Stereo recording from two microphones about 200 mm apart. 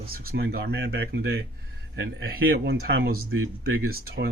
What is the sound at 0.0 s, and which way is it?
Speech, 45° right (ahead or behind).